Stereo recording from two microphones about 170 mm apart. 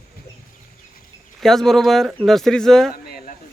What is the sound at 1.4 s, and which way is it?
Speech, centre (ahead or behind).